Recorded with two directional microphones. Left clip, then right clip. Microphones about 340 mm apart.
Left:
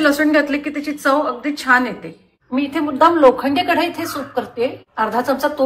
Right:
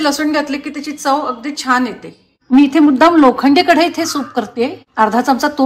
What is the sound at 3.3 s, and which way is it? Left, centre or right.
A woman's voice, right.